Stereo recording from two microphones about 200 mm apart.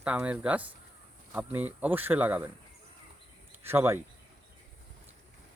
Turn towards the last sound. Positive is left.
turn(degrees=-10)  # may be behind; listen again after turning